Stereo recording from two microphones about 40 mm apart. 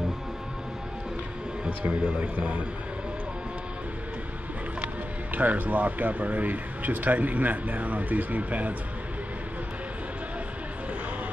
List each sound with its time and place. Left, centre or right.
1.7 s speech: right
4.8 s speech: right